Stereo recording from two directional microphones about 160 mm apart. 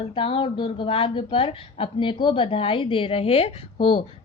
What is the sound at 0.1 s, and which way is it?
A woman's voice, 35° left (ahead or behind).